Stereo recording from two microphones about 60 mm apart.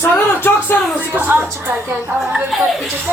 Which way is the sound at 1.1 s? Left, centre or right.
Right.